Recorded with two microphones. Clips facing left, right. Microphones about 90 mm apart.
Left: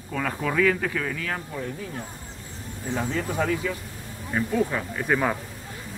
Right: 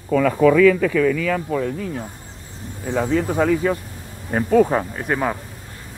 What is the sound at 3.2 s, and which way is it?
Speech, 45° right (ahead or behind).